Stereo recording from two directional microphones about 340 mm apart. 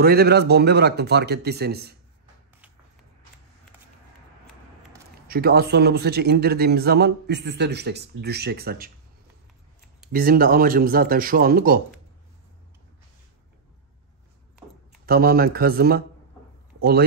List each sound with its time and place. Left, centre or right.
0.0 s a man's voice: right
5.3 s a man's voice: right
10.1 s a man's voice: right
15.0 s a man's voice: right